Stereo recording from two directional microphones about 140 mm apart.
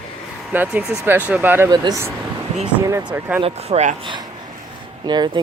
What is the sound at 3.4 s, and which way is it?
Speech, 50° right (ahead or behind).